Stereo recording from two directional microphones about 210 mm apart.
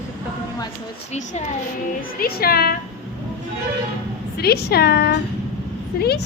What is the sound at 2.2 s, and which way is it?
Speech, 45° left (ahead or behind).